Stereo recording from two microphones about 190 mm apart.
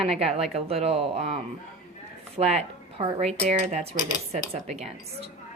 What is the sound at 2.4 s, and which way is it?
Speech, 35° right (ahead or behind).